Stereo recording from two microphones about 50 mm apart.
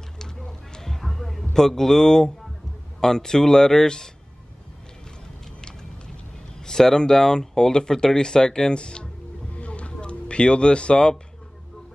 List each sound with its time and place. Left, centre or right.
0.5 s music: centre
1.5 s speech: centre
5.6 s vehicle: centre
6.6 s speech: centre